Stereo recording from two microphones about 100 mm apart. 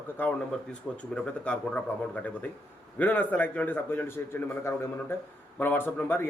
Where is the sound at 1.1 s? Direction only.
10° left (ahead or behind).